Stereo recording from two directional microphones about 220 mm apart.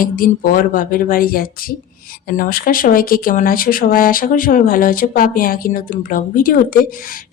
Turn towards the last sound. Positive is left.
turn(degrees=40)  # may be behind; listen again after turning